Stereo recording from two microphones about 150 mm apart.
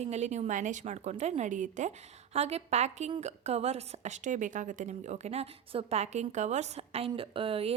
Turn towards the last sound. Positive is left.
turn(degrees=-40)  # may be behind; listen again after turning